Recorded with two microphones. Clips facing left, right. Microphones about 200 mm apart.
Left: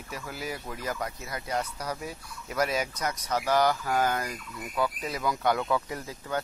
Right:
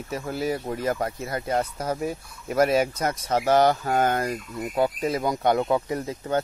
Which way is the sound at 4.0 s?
50° right (ahead or behind).